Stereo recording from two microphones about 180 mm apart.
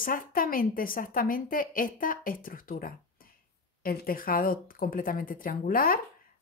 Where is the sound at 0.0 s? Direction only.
50° left (ahead or behind).